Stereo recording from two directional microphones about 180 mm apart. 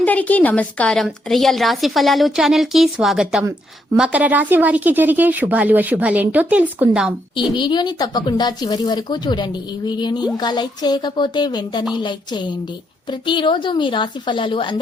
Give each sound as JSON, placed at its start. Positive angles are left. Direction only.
{"t": 0.0, "sound": "a woman's voice", "side_deg": 10}
{"t": 7.5, "sound": "speech", "side_deg": 25}